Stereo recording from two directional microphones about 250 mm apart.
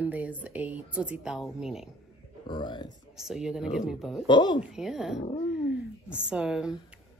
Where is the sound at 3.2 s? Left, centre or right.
Centre.